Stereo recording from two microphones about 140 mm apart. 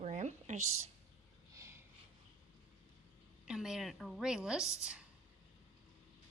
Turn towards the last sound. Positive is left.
turn(degrees=-5)  # may be behind; listen again after turning